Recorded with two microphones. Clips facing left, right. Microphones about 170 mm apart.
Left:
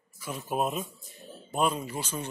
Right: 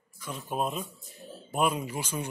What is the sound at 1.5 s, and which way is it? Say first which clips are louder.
Speech: even; 10° right (ahead or behind).